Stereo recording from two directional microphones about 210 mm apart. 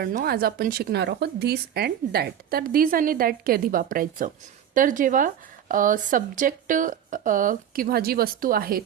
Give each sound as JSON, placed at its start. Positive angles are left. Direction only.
{"t": 0.0, "sound": "speech", "side_deg": -40}